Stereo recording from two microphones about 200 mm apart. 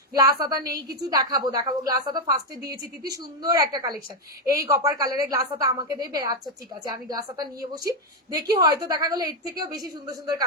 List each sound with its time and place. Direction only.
0.2 s a woman's voice: 20° right (ahead or behind)